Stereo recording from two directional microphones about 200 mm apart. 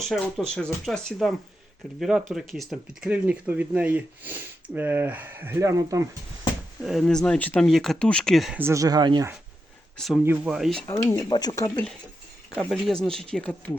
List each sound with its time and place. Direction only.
0.1 s speech: 5° left (ahead or behind); by 6.1 s 15° right (ahead or behind)
6.8 s speech: centre (ahead or behind)
8.6 s speech: 15° right (ahead or behind)
10.2 s speech: 5° right (ahead or behind)
10.8 s speech: 15° left (ahead or behind)
12.5 s speech: 5° left (ahead or behind)